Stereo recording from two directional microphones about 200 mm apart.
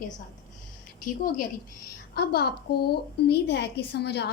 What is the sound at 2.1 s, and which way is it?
A woman's voice, 50° left (ahead or behind).